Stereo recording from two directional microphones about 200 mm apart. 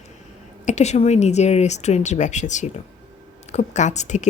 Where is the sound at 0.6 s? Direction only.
35° left (ahead or behind).